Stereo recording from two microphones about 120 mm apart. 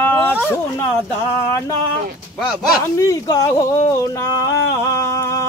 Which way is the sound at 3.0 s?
30° left (ahead or behind).